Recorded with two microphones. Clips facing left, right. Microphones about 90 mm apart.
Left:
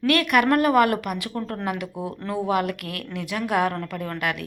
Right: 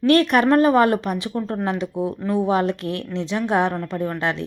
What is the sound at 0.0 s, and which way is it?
A woman's voice, 30° right (ahead or behind).